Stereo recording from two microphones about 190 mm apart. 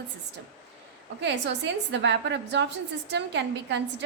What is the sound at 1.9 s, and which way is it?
A woman's voice, 70° right (ahead or behind).